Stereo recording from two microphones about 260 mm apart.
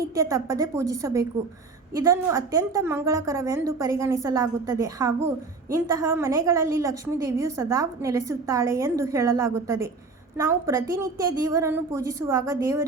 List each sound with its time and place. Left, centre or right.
0.0 s a woman's voice: centre